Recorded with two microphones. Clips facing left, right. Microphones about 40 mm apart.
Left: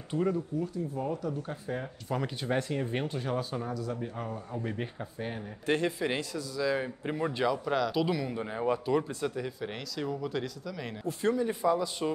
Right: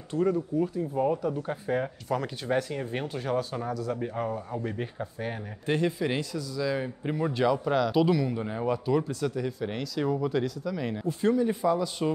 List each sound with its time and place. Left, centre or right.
0.1 s speech: left
0.6 s speech: right
2.0 s speech: centre
4.0 s speech: centre
4.6 s speech: centre
5.7 s speech: left
6.6 s a man's voice: centre
7.4 s speech: centre
8.1 s a man's voice: centre
8.6 s speech: left
9.2 s speech: centre